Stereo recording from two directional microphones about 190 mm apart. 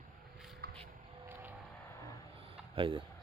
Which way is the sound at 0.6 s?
50° right (ahead or behind).